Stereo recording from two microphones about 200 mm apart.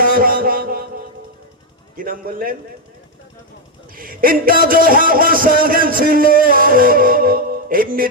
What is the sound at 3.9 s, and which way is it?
A man's voice, 45° right (ahead or behind).